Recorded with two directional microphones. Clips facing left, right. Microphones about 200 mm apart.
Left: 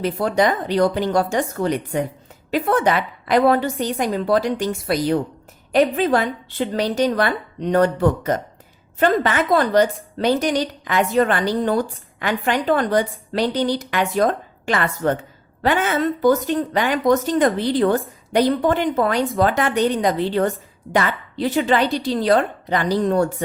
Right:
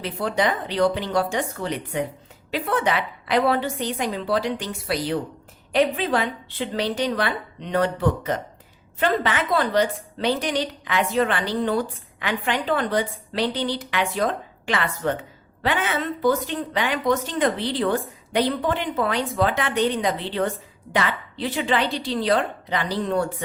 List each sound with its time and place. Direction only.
0.0 s a woman's voice: 45° left (ahead or behind)